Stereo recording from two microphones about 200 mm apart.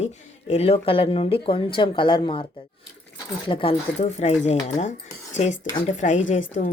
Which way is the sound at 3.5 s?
25° left (ahead or behind).